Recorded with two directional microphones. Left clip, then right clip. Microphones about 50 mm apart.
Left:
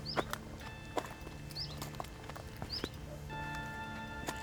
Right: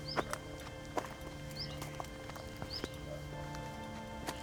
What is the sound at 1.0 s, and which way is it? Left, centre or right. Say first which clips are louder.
Music: even; centre.